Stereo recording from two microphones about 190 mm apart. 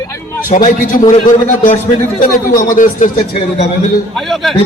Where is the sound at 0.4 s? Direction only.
45° left (ahead or behind).